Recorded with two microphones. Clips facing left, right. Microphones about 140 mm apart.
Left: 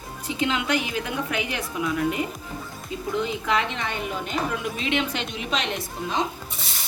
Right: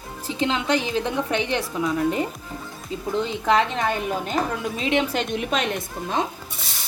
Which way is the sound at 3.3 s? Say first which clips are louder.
Right 5 dB; 35° right (ahead or behind).